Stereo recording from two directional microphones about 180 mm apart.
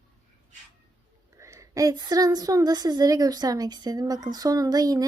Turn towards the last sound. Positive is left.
turn(degrees=-20)  # may be behind; listen again after turning